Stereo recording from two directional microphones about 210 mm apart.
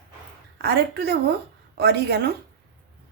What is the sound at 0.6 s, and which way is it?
A woman's voice, 50° right (ahead or behind).